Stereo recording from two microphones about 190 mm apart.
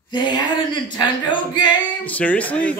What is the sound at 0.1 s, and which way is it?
Speech, 25° left (ahead or behind).